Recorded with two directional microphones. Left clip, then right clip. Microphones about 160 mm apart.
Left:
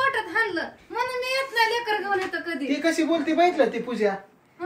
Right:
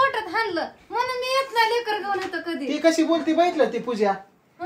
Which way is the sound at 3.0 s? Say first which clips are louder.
Right 1 dB; 90° right.